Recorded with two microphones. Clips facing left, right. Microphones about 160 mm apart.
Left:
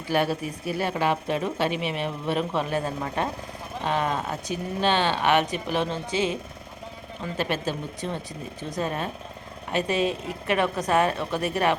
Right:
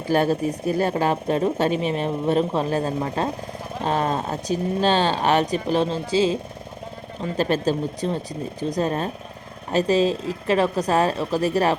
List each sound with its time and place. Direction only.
0.1 s speech: 40° right (ahead or behind)